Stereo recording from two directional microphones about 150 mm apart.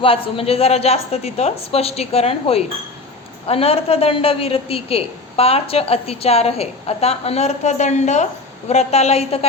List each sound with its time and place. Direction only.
0.3 s a woman's voice: 40° left (ahead or behind)